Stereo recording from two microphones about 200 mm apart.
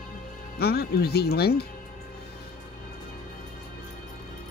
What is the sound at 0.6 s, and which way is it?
Speech, 50° left (ahead or behind).